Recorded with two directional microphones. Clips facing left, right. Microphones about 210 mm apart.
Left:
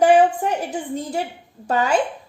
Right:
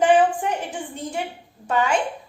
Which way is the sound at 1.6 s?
40° left (ahead or behind).